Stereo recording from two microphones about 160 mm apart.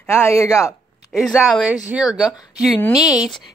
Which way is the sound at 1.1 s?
Centre (ahead or behind).